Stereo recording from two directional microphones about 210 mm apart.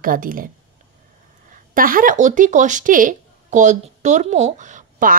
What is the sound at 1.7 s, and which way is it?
A woman's voice, 40° right (ahead or behind).